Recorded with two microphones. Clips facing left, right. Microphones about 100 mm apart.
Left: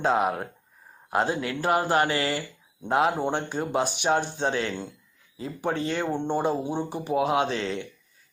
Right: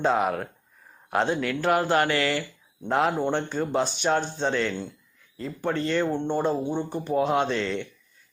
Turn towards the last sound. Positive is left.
turn(degrees=5)  # may be behind; listen again after turning